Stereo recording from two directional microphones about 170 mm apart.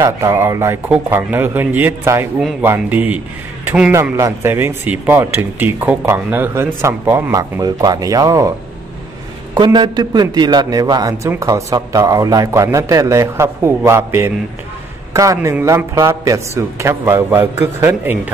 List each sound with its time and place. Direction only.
0.0 s a man's voice: 15° right (ahead or behind)
3.9 s a man's voice: 15° right (ahead or behind)